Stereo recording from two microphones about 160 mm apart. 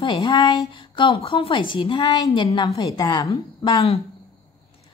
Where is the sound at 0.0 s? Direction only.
30° left (ahead or behind).